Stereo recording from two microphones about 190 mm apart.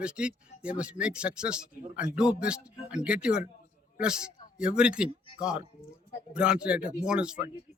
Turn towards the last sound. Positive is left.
turn(degrees=-5)  # may be behind; listen again after turning